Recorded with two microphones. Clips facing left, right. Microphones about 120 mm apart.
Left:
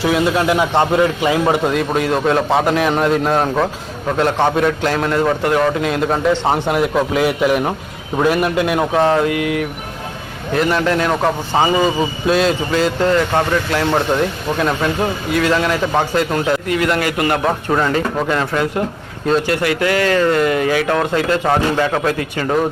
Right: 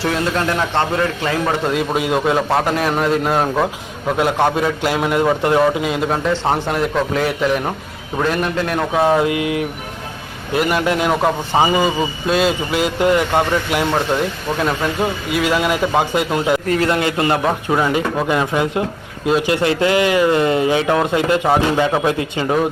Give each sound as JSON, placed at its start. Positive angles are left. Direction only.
{"t": 0.0, "sound": "a man's voice", "side_deg": 5}
{"t": 1.7, "sound": "a man's voice", "side_deg": -5}
{"t": 5.4, "sound": "a sound", "side_deg": -20}
{"t": 5.6, "sound": "a man's voice", "side_deg": -5}
{"t": 9.0, "sound": "a sound", "side_deg": -15}
{"t": 10.5, "sound": "a man's voice", "side_deg": -10}
{"t": 13.9, "sound": "a man's voice", "side_deg": 0}
{"t": 16.6, "sound": "speech", "side_deg": -40}
{"t": 16.9, "sound": "a sound", "side_deg": -20}
{"t": 17.4, "sound": "a man's voice", "side_deg": -10}
{"t": 19.5, "sound": "a man's voice", "side_deg": -25}